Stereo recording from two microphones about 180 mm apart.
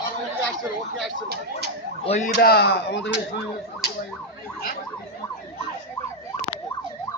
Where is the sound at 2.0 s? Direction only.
40° left (ahead or behind).